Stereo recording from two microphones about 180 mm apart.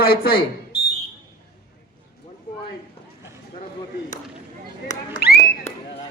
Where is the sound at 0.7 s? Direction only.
60° left (ahead or behind).